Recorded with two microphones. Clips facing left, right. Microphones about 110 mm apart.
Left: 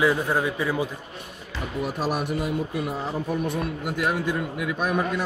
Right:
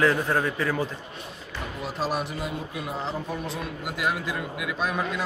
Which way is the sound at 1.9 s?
5° left (ahead or behind).